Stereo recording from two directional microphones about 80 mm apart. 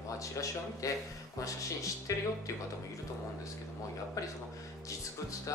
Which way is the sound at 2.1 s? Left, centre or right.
Left.